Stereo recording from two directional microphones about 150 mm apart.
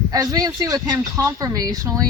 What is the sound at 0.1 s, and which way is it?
Speech, 25° right (ahead or behind).